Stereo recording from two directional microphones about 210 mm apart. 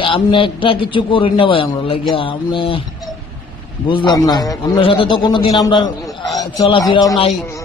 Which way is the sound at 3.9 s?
20° left (ahead or behind).